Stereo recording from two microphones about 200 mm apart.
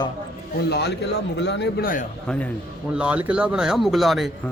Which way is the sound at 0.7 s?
55° left (ahead or behind).